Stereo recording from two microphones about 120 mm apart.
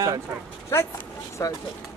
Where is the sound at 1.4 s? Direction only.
25° left (ahead or behind).